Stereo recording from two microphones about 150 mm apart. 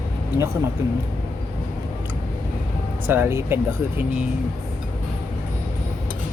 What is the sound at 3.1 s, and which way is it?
Speech, 15° right (ahead or behind).